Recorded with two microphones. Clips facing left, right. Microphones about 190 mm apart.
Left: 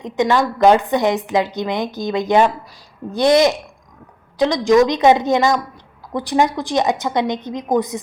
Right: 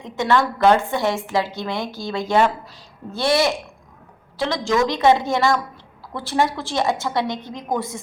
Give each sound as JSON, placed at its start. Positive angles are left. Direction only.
{"t": 0.0, "sound": "a woman's voice", "side_deg": 20}